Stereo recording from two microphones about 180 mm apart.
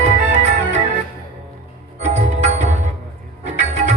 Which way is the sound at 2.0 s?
40° right (ahead or behind).